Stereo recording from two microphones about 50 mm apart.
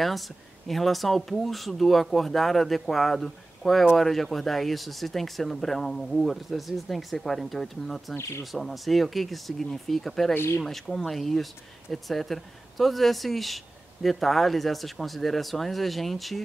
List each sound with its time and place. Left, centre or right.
0.7 s speech: centre
10.3 s speech: left
10.6 s speech: centre